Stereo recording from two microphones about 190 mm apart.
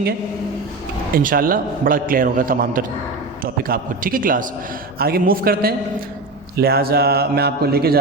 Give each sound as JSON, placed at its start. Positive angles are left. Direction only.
{"t": 1.1, "sound": "a man's voice", "side_deg": -50}